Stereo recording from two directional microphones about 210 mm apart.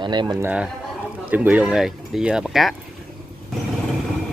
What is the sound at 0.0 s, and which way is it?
Speech, 20° right (ahead or behind).